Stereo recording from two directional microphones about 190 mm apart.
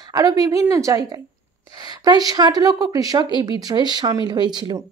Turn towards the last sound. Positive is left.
turn(degrees=-20)  # may be behind; listen again after turning